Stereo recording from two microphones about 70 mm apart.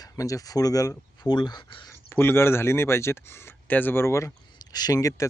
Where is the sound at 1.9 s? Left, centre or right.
Left.